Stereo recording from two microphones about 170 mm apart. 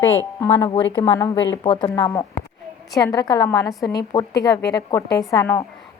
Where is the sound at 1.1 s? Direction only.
20° left (ahead or behind).